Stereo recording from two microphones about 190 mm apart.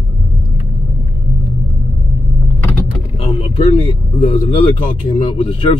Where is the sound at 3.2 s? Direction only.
30° left (ahead or behind).